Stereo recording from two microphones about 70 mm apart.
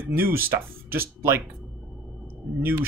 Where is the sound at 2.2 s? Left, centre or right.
Right.